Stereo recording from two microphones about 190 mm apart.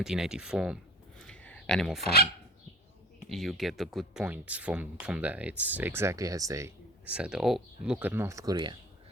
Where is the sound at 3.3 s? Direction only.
Centre (ahead or behind); by 8.8 s 25° right (ahead or behind).